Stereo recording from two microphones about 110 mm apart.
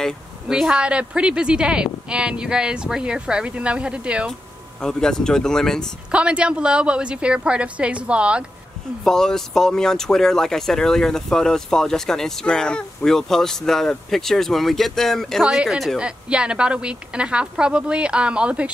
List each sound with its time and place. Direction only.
0.5 s a woman's voice: 5° right (ahead or behind)
4.8 s speech: 5° left (ahead or behind)
6.1 s a woman's voice: 10° right (ahead or behind)
9.0 s a woman's voice: 5° left (ahead or behind)